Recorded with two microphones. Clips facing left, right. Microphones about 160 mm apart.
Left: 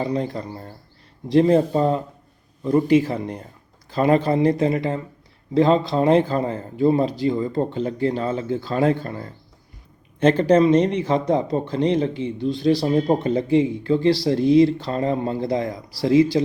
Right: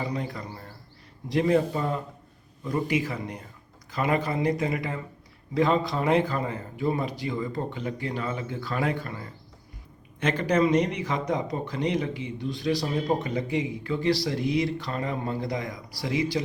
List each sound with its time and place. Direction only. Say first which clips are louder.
0.0 s speech: left 7 dB; 30° left (ahead or behind)